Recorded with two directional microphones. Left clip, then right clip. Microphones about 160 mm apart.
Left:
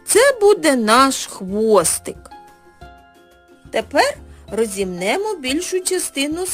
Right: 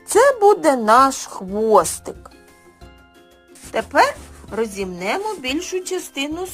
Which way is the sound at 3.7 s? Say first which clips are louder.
Right 1 dB; 20° left (ahead or behind).